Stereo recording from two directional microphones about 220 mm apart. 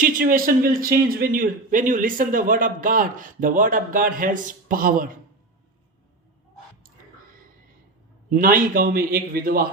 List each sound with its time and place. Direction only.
0.0 s a man's voice: 40° right (ahead or behind)
8.3 s a man's voice: 40° right (ahead or behind)